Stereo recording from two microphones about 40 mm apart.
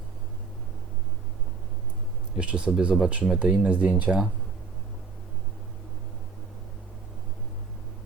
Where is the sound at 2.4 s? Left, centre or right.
Right.